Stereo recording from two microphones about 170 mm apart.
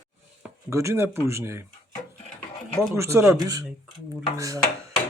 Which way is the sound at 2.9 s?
15° right (ahead or behind).